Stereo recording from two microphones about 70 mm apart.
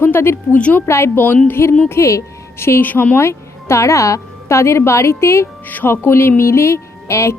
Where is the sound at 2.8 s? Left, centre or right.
Left.